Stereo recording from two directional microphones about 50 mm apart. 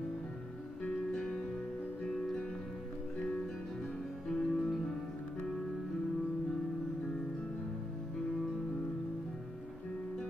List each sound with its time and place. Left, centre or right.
0.8 s music: centre
4.3 s music: centre